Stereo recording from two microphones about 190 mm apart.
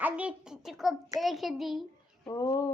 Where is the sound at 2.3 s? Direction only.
20° left (ahead or behind).